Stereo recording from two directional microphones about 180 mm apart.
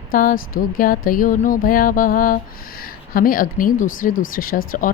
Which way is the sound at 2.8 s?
50° left (ahead or behind).